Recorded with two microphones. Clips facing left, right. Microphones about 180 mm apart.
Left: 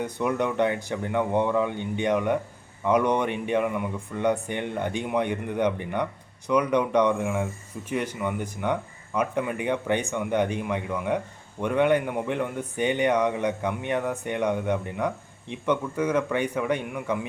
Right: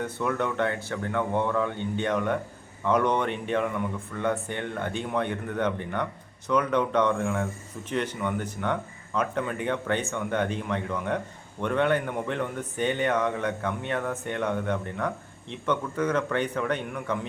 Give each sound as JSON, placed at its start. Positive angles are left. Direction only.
{"t": 0.0, "sound": "speech", "side_deg": 15}